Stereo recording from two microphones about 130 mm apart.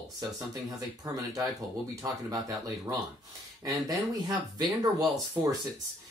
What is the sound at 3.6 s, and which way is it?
Speech, 30° right (ahead or behind).